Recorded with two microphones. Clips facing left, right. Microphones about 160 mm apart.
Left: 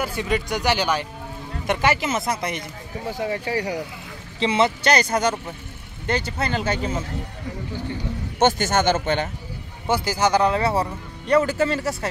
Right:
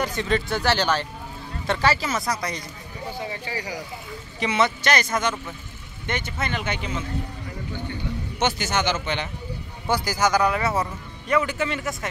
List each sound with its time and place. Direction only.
0.0 s speech: 10° left (ahead or behind)
3.2 s speech: 65° left (ahead or behind)
4.4 s a man's voice: 30° left (ahead or behind)
8.4 s a man's voice: 50° left (ahead or behind)
9.8 s a man's voice: 25° left (ahead or behind)